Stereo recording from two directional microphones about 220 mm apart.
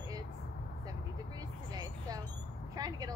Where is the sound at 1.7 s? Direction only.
20° right (ahead or behind).